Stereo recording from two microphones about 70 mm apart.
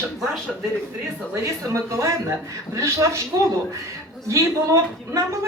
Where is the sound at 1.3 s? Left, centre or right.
Right.